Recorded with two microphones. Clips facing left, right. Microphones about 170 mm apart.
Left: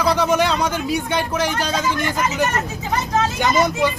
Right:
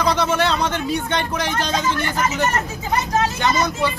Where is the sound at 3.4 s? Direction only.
20° left (ahead or behind).